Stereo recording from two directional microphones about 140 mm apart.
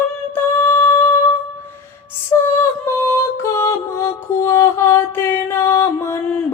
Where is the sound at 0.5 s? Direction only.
20° left (ahead or behind).